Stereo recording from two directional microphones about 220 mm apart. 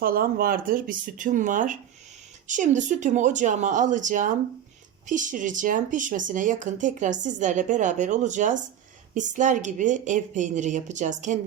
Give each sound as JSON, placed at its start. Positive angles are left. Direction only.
{"t": 0.0, "sound": "speech", "side_deg": -40}